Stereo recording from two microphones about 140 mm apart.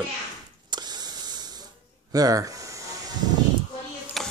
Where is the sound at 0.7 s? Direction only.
30° right (ahead or behind).